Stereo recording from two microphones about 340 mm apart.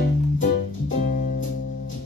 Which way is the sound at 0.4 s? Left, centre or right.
Left.